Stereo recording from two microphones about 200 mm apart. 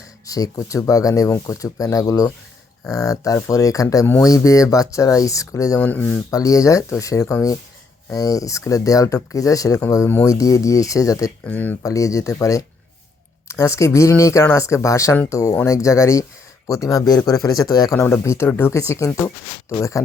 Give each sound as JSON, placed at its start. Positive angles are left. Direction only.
{"t": 0.3, "sound": "speech", "side_deg": 20}